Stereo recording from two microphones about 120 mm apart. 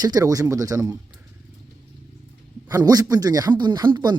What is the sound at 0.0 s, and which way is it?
Speech, 30° right (ahead or behind).